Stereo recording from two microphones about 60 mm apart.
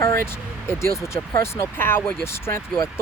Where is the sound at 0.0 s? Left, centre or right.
Left.